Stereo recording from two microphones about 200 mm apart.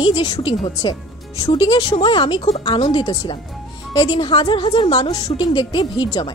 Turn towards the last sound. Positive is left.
turn(degrees=25)  # may be behind; listen again after turning